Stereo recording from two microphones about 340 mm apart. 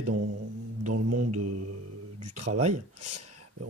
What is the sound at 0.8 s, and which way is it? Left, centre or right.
Mantra, right.